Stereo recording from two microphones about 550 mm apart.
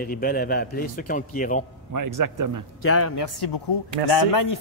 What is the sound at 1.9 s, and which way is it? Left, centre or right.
Speech, right.